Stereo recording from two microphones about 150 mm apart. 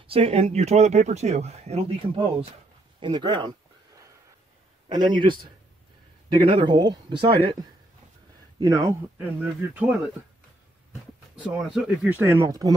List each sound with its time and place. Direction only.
0.0 s speech: 35° right (ahead or behind)
3.0 s speech: 30° right (ahead or behind)
4.8 s speech: 30° right (ahead or behind)
8.5 s speech: 25° right (ahead or behind)
9.4 s speech: 10° right (ahead or behind)
11.3 s speech: 5° right (ahead or behind); by 12.7 s 25° right (ahead or behind)